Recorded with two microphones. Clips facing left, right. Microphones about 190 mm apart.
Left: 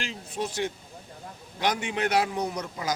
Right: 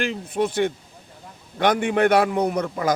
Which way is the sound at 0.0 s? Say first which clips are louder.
Right 9 dB; 60° right (ahead or behind).